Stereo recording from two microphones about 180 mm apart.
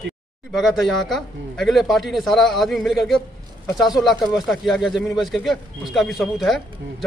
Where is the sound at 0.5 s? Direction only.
Centre (ahead or behind).